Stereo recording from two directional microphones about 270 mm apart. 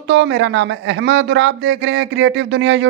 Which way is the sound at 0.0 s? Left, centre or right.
Right.